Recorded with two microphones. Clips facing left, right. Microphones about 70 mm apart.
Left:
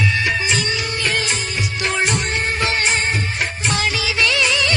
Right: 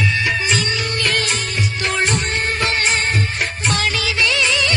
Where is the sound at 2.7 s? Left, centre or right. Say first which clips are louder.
Even; right.